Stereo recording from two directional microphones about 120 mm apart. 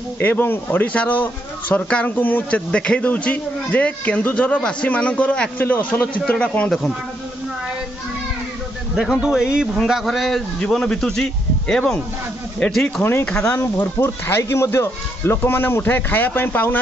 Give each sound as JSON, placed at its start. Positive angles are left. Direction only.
{"t": 0.2, "sound": "a man's voice", "side_deg": 15}
{"t": 8.9, "sound": "a man's voice", "side_deg": -5}
{"t": 13.0, "sound": "a man's voice", "side_deg": 20}